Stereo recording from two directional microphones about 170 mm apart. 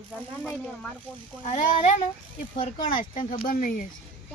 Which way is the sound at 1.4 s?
45° left (ahead or behind).